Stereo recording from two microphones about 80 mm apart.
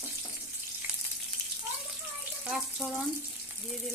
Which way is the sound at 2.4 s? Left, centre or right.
Centre.